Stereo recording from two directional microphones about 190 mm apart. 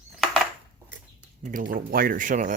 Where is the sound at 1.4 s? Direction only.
45° right (ahead or behind).